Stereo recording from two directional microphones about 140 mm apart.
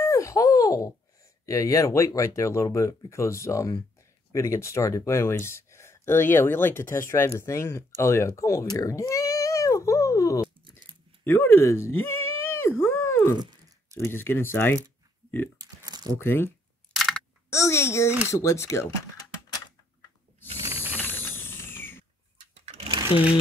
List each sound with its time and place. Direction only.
0.0 s a sound: 20° left (ahead or behind)
1.4 s speech: 25° left (ahead or behind)
11.2 s a sound: 15° left (ahead or behind)
13.9 s speech: 15° left (ahead or behind)
15.5 s a sound: 25° right (ahead or behind)
16.2 s speech: 15° left (ahead or behind)
16.9 s typing: centre (ahead or behind)
17.5 s a sound: 20° left (ahead or behind)
18.3 s speech: 20° left (ahead or behind)
20.6 s mechanisms: 15° right (ahead or behind)
20.9 s mechanisms: 15° left (ahead or behind)
22.7 s sewing machine: 45° right (ahead or behind)